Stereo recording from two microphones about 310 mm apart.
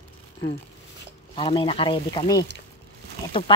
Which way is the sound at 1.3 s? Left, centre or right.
Centre.